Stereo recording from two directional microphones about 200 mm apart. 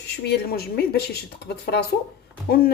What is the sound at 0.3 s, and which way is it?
Speech, 50° left (ahead or behind).